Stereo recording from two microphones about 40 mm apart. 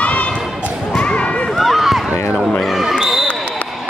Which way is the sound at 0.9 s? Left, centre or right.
Left.